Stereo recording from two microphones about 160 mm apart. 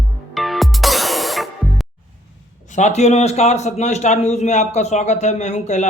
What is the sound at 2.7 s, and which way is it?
A man's voice, 45° left (ahead or behind).